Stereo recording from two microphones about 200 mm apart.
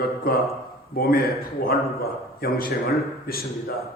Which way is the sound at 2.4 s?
45° left (ahead or behind).